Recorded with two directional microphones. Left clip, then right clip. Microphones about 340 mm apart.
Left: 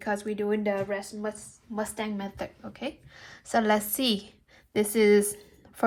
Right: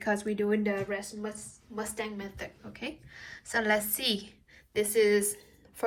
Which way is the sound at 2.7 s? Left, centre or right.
Centre.